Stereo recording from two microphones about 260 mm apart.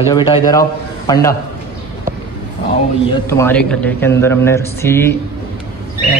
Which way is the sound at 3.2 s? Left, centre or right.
Centre.